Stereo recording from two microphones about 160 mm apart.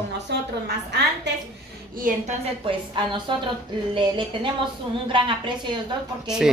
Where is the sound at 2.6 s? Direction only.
30° right (ahead or behind).